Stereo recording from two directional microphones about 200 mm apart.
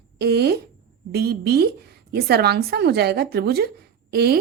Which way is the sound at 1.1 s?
50° right (ahead or behind).